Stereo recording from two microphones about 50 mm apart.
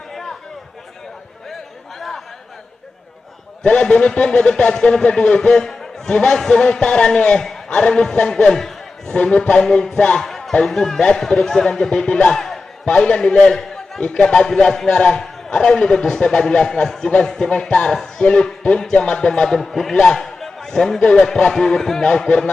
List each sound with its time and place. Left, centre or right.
2.0 s chatter: centre
3.6 s a man's voice: centre
9.1 s speech: left
9.6 s a man's voice: centre
10.2 s a sound: centre
10.7 s a man's voice: centre
12.5 s a sound: centre
14.1 s a man's voice: centre